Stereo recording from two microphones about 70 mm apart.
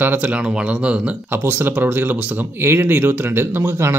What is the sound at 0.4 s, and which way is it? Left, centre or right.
Speech, centre.